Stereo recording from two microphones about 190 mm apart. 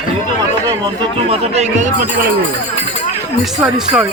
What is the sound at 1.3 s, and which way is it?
Speech, 35° right (ahead or behind).